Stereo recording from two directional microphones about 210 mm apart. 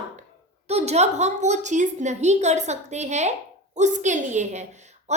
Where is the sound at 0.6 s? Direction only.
30° right (ahead or behind).